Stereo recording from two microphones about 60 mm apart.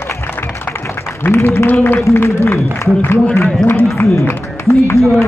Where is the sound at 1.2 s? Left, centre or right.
Left.